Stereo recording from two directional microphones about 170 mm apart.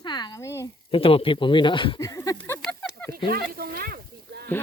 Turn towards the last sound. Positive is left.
turn(degrees=-65)  # may be behind; listen again after turning